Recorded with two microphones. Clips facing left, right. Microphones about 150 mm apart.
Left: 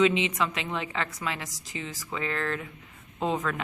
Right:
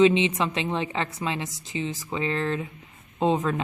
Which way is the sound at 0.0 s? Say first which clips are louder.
Right 4 dB; 25° right (ahead or behind).